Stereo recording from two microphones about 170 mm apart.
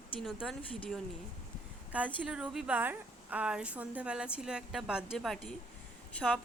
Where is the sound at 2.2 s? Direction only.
5° right (ahead or behind).